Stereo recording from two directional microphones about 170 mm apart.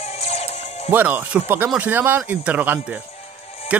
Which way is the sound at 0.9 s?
10° right (ahead or behind).